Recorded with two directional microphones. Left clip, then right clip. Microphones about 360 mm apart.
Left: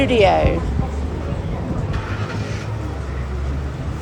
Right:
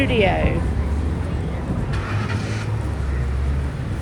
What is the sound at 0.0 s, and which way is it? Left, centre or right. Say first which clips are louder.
Speech: left 5 dB; centre.